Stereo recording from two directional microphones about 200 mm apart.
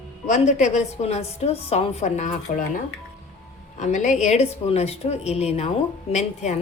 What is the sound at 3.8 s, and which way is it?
Speech, 35° left (ahead or behind).